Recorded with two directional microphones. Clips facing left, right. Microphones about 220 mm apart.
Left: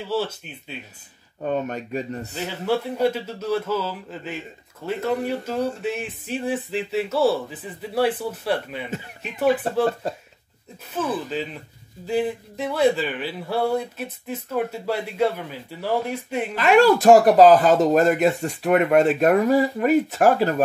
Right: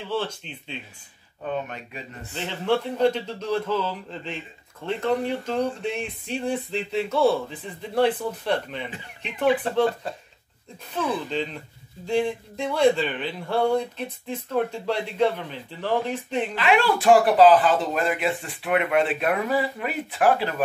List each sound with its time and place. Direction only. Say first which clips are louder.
0.1 s speech: left 2 dB; 5° left (ahead or behind)
1.4 s speech: left 5 dB; 40° left (ahead or behind)
2.3 s speech: right 1 dB; 5° left (ahead or behind)
10.0 s speech: left 5 dB; 40° left (ahead or behind)
10.9 s speech: left 1 dB; 5° left (ahead or behind)
16.5 s speech: left 7 dB; 45° left (ahead or behind)